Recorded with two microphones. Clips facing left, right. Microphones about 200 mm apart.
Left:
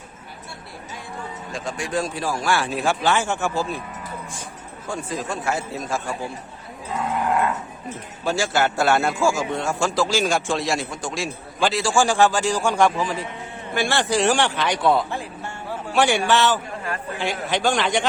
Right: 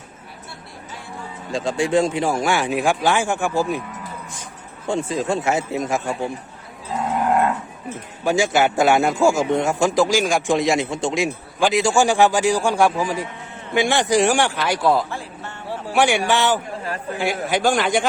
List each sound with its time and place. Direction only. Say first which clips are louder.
1.5 s a man's voice: right 8 dB; 25° right (ahead or behind)
4.9 s a man's voice: right 7 dB; 25° right (ahead or behind)
8.2 s a man's voice: right 4 dB; 15° right (ahead or behind)
15.1 s music: left 1 dB; 15° left (ahead or behind)
15.9 s a man's voice: right 1 dB; 10° right (ahead or behind)